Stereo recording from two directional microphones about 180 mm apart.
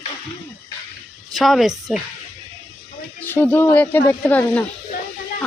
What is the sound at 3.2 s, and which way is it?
Speech, 10° left (ahead or behind).